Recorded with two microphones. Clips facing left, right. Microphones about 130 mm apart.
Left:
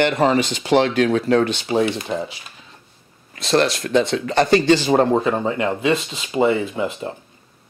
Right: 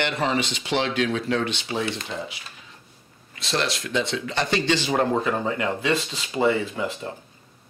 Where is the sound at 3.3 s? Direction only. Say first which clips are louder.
Left 8 dB; 45° left (ahead or behind).